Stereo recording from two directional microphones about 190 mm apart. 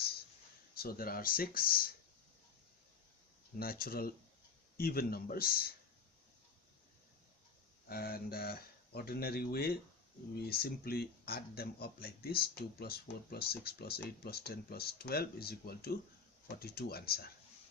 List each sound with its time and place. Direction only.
0.7 s speech: 50° left (ahead or behind)
3.6 s speech: 50° left (ahead or behind)
7.9 s speech: 50° left (ahead or behind)